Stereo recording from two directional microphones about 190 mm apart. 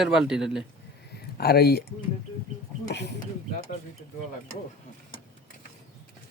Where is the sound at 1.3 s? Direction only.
55° left (ahead or behind).